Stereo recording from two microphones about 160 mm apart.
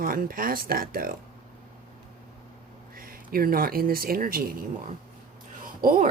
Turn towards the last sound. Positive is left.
turn(degrees=-60)  # may be behind; listen again after turning